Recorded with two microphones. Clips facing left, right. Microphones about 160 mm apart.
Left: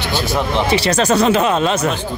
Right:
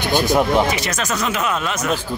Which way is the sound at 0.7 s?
30° left (ahead or behind).